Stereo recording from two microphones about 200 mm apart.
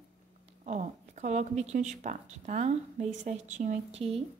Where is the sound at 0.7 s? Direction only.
35° right (ahead or behind).